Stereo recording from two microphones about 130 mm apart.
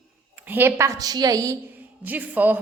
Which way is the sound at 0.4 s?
15° right (ahead or behind).